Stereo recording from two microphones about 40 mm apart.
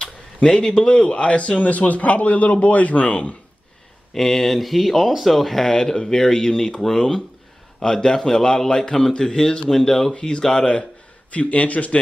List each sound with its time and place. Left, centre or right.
0.0 s speech: centre
4.1 s speech: centre
10.1 s speech: left
11.3 s speech: left